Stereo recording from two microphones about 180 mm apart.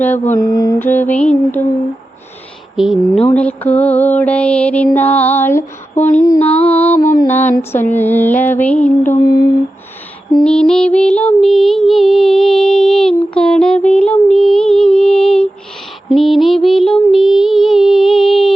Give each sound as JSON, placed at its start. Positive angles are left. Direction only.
{"t": 0.3, "sound": "music", "side_deg": 20}
{"t": 2.7, "sound": "music", "side_deg": 0}
{"t": 6.4, "sound": "music", "side_deg": 35}
{"t": 6.7, "sound": "music", "side_deg": 10}
{"t": 10.4, "sound": "music", "side_deg": 5}